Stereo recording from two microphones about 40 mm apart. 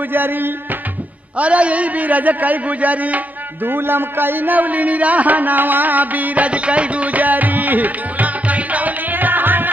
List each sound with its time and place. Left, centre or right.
0.1 s music: right
1.4 s a man's voice: right
3.6 s a man's voice: right
9.1 s music: right